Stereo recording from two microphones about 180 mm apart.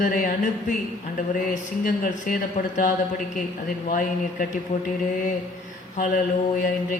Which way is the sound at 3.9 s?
50° left (ahead or behind).